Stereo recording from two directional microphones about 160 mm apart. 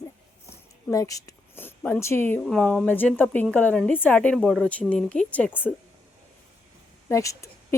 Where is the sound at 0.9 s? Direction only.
20° left (ahead or behind).